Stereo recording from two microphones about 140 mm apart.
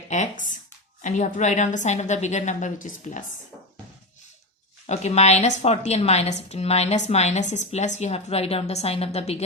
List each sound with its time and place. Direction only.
0.1 s a woman's voice: 60° left (ahead or behind)
4.9 s a woman's voice: 50° left (ahead or behind)